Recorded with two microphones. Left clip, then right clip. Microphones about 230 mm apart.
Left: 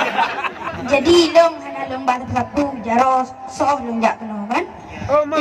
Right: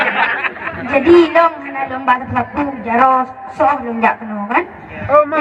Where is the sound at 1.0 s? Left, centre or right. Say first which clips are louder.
Right 3 dB; left.